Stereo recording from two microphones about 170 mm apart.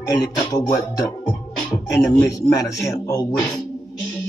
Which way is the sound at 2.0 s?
20° left (ahead or behind).